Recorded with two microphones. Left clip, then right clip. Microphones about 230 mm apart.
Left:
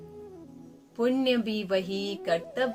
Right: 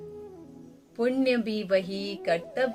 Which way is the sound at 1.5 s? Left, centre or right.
Centre.